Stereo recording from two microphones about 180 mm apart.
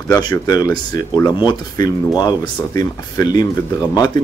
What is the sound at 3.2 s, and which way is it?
Speech, 25° left (ahead or behind).